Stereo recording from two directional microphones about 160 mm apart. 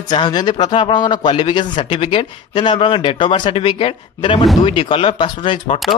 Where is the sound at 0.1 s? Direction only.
25° left (ahead or behind).